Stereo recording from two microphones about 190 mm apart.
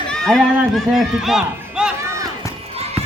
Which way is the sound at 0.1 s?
Centre (ahead or behind).